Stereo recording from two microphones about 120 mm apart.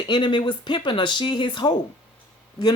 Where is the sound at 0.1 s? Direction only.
40° left (ahead or behind).